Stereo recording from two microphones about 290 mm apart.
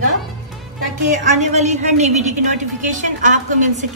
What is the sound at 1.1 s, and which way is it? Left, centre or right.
Speech, right.